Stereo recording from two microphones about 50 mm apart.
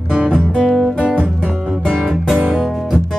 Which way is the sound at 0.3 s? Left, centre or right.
Centre.